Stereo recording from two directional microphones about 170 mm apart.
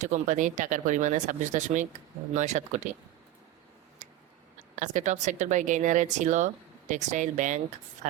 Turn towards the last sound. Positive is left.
turn(degrees=-45)  # may be behind; listen again after turning